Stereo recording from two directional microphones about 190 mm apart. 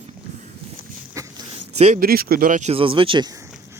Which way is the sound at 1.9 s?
50° right (ahead or behind).